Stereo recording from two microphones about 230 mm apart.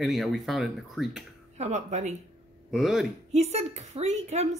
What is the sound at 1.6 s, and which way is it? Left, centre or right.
Speech, right.